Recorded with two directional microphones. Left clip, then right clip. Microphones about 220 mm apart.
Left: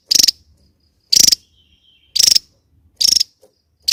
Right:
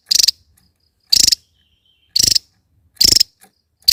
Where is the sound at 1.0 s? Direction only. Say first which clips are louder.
Left 1 dB; 10° right (ahead or behind).